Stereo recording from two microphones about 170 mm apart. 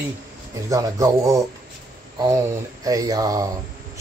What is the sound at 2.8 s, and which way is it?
Speech, 20° right (ahead or behind).